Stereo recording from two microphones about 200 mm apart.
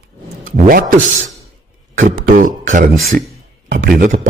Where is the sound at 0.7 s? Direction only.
45° right (ahead or behind).